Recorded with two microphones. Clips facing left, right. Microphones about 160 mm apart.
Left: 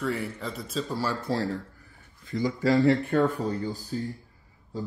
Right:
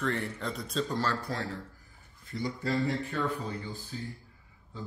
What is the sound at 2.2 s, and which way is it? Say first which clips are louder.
Speech: left 8 dB; 90° left.